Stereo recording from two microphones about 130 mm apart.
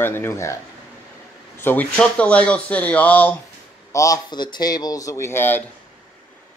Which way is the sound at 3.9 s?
25° left (ahead or behind).